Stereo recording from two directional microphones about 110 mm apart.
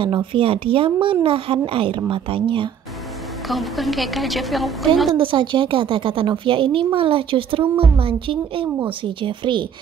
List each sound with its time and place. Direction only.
0.0 s a woman's voice: 50° right (ahead or behind)
3.4 s a woman's voice: centre (ahead or behind)
5.1 s a woman's voice: 50° right (ahead or behind)